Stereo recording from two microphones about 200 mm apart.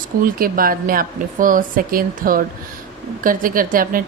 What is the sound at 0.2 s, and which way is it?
A woman's voice, 45° right (ahead or behind).